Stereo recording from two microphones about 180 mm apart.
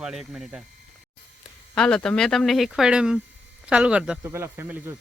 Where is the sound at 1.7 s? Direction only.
5° left (ahead or behind).